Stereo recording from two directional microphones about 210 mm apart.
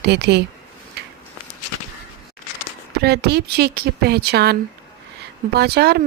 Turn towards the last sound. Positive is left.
turn(degrees=-50)  # may be behind; listen again after turning